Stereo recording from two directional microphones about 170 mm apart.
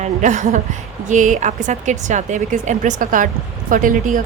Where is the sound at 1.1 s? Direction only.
45° right (ahead or behind).